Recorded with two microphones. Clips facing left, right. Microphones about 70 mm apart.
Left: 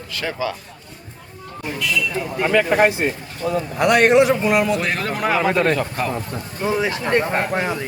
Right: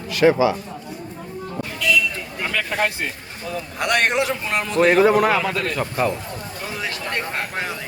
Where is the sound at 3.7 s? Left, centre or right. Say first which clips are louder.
Left 6 dB; centre.